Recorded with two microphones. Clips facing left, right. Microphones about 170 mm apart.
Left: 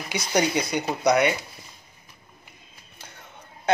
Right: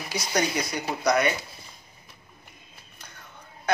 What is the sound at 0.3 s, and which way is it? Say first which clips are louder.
Speech: left 4 dB; 25° left (ahead or behind).